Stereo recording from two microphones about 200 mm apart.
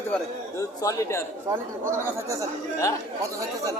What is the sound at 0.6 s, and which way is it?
Speech, 15° left (ahead or behind).